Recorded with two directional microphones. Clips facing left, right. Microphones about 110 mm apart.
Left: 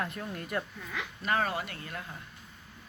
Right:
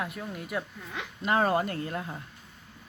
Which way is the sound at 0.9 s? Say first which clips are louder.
Right 3 dB; 25° right (ahead or behind).